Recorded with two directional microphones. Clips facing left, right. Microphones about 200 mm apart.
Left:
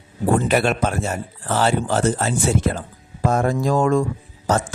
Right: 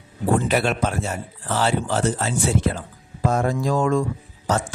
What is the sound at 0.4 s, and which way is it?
Speech, 50° left (ahead or behind).